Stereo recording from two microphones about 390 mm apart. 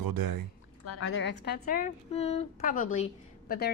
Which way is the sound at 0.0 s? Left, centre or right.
Right.